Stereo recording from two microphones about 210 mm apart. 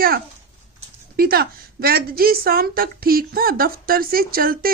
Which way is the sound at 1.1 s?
45° right (ahead or behind).